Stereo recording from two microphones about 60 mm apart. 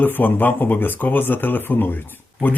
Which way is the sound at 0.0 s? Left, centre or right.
Left.